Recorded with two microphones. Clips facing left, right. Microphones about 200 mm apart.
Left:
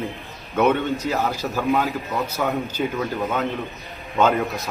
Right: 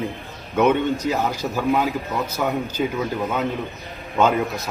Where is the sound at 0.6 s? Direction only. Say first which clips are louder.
Right 1 dB; 15° right (ahead or behind).